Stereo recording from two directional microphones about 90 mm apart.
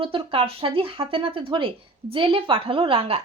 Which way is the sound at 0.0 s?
80° right.